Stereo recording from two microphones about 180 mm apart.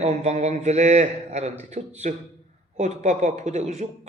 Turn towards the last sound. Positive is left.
turn(degrees=-40)  # may be behind; listen again after turning